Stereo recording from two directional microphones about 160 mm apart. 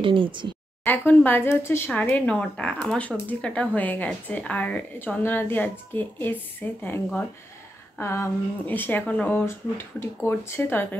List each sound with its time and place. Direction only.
0.0 s speech: 30° right (ahead or behind)
0.8 s speech: 10° left (ahead or behind)